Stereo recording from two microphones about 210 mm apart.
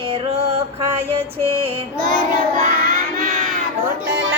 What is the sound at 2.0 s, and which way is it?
Child singing, 40° right (ahead or behind).